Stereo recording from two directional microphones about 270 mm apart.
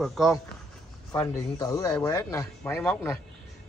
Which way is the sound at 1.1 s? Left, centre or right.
Centre.